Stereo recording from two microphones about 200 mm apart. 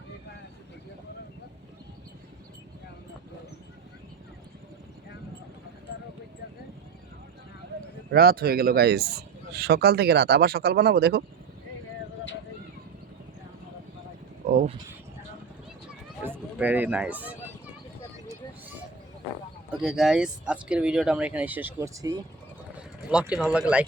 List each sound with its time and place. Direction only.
8.1 s speech: 50° right (ahead or behind)
14.5 s a sound: 35° right (ahead or behind)
16.6 s speech: 10° right (ahead or behind)
19.7 s speech: 5° right (ahead or behind)
23.3 s speech: 5° right (ahead or behind)